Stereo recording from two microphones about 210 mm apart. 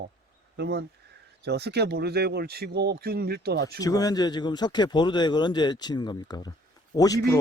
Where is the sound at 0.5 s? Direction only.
50° right (ahead or behind).